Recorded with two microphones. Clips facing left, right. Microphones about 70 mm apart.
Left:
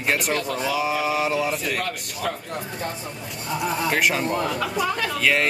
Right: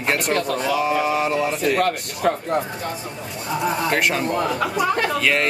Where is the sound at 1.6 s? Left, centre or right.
Right.